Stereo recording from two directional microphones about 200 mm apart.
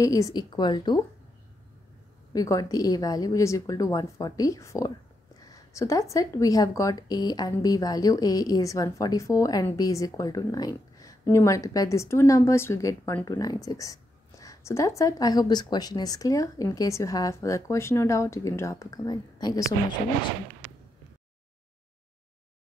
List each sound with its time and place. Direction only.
0.0 s a woman's voice: 15° left (ahead or behind)
2.3 s a woman's voice: 15° left (ahead or behind)